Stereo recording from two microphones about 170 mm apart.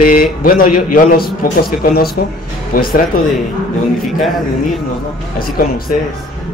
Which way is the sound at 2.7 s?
55° left (ahead or behind).